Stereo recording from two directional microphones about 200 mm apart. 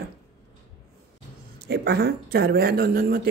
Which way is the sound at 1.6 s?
55° right (ahead or behind).